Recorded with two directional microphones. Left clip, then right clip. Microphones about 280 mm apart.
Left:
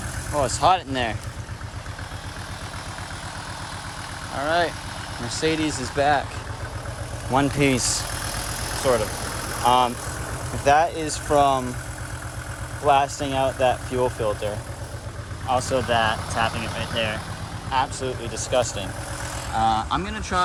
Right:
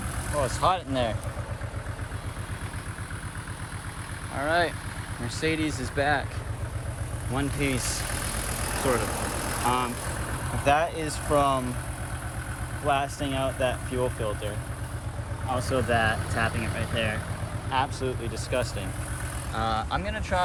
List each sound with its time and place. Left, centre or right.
0.3 s speech: centre
4.4 s speech: centre
7.3 s speech: centre
9.6 s speech: centre
12.8 s speech: centre
15.5 s speech: centre